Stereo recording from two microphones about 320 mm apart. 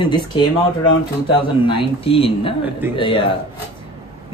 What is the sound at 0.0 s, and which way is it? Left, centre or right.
Speech, centre.